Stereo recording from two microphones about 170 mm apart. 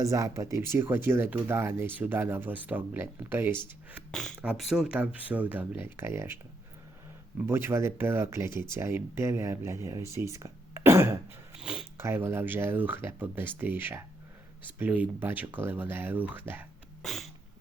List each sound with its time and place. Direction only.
0.0 s speech: 20° right (ahead or behind)
7.4 s speech: 15° right (ahead or behind)
11.5 s sniff: 5° right (ahead or behind)
12.0 s speech: 15° right (ahead or behind)
17.0 s cat: centre (ahead or behind)